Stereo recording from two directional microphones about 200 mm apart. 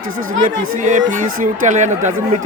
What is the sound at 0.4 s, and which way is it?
Speech, 40° right (ahead or behind).